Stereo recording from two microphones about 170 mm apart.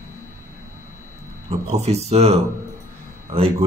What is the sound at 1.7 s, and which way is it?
A man's voice, 40° right (ahead or behind).